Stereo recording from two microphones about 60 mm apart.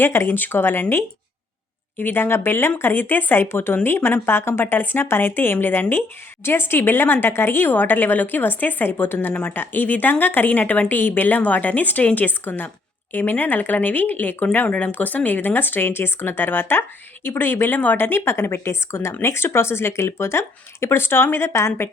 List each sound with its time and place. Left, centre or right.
0.0 s speech: left
0.3 s speech: left